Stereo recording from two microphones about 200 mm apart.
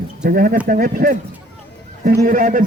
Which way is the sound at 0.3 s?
45° right (ahead or behind).